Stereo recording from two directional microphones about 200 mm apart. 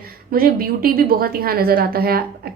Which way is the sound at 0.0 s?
50° right (ahead or behind).